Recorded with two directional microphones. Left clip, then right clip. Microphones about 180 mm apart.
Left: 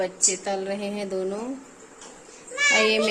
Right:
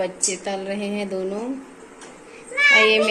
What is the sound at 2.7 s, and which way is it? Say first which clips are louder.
Speech: right 6 dB; 25° left (ahead or behind).